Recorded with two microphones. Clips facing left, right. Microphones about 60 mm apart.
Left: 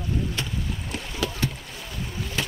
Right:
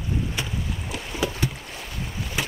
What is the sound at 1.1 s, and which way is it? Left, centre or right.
Boat, centre.